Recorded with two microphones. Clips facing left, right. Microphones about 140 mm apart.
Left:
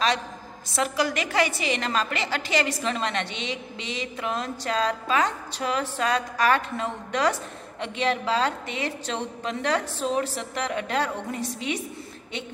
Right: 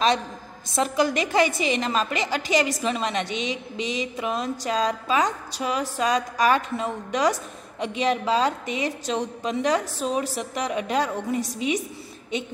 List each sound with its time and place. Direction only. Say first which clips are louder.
0.7 s a woman's voice: right 3 dB; 20° right (ahead or behind)